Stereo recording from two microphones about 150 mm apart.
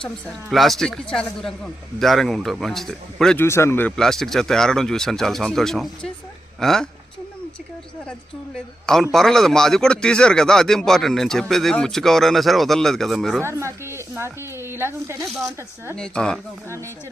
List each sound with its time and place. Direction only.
0.5 s speech: centre (ahead or behind)
3.3 s speech: 15° left (ahead or behind)
8.5 s speech: 5° left (ahead or behind)
13.4 s a sound: 20° right (ahead or behind)
16.0 s speech: 5° left (ahead or behind)